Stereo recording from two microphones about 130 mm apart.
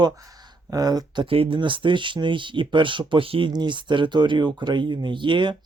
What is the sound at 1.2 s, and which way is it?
Speech, 45° right (ahead or behind).